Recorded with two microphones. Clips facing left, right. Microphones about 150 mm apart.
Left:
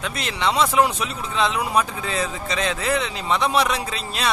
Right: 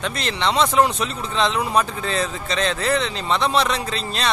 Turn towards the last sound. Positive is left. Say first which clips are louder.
# right 2 dB
turn(degrees=10)  # may be behind; listen again after turning